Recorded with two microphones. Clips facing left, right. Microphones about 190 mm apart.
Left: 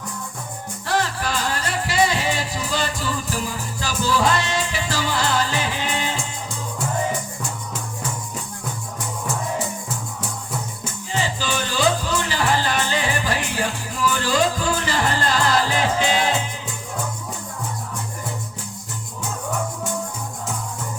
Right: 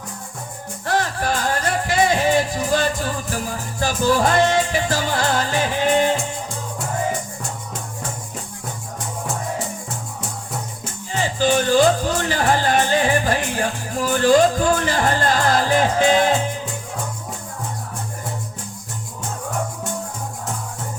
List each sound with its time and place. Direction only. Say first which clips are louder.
0.9 s music: right 2 dB; 50° right (ahead or behind)
11.2 s music: right 7 dB; 50° right (ahead or behind)